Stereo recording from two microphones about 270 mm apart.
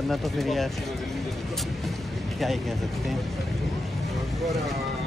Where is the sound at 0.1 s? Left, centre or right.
Centre.